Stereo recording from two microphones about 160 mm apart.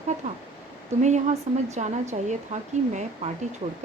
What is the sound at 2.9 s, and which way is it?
Speech, 50° right (ahead or behind).